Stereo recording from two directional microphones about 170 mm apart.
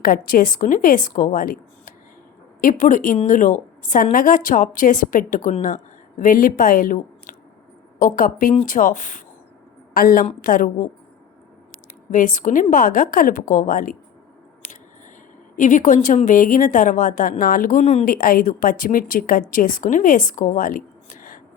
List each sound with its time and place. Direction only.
0.0 s a woman's voice: 55° left (ahead or behind)
12.1 s a woman's voice: 50° left (ahead or behind)
15.5 s a woman's voice: 50° left (ahead or behind)
18.1 s a woman's voice: 60° left (ahead or behind)